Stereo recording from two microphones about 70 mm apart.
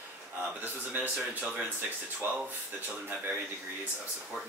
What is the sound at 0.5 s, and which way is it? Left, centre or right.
Speech, right.